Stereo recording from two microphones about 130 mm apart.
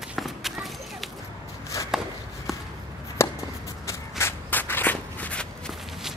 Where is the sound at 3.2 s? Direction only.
20° left (ahead or behind).